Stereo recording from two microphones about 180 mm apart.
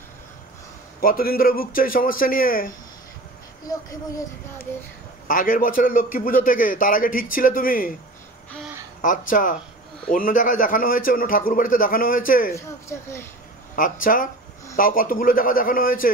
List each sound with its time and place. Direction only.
1.0 s a man's voice: 55° left (ahead or behind)
3.6 s speech: 20° left (ahead or behind)
5.3 s a man's voice: 50° left (ahead or behind)
9.3 s a man's voice: 50° left (ahead or behind)
12.5 s speech: 15° left (ahead or behind)
13.7 s a man's voice: 50° left (ahead or behind)